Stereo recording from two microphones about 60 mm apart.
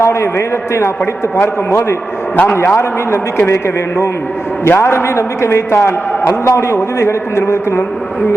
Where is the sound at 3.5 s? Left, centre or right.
Left.